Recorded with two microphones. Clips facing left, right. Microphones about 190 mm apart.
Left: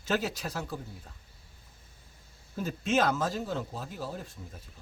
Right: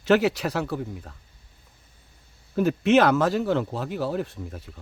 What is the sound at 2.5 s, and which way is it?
Speech, 70° right (ahead or behind).